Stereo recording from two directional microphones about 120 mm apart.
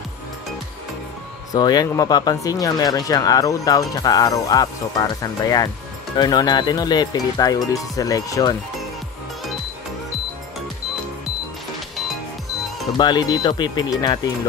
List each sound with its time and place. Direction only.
1.5 s speech: 35° left (ahead or behind)
12.9 s speech: 35° left (ahead or behind)